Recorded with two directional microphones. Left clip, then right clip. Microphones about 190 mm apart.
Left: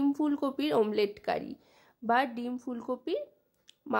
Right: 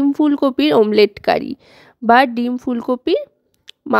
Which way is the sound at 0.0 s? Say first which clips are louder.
Right 14 dB; 40° right (ahead or behind).